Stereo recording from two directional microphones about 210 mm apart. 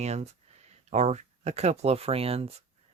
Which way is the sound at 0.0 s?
30° right (ahead or behind).